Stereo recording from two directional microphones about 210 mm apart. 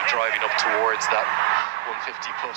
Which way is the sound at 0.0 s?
60° right (ahead or behind).